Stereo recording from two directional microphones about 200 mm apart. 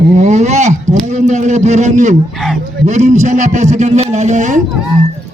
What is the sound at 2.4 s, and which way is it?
Speech, 5° left (ahead or behind).